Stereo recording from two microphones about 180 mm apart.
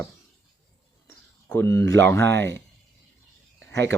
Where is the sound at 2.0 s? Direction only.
15° left (ahead or behind).